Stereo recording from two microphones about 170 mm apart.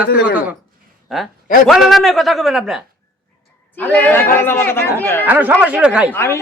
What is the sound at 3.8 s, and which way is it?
A man's voice, 10° left (ahead or behind).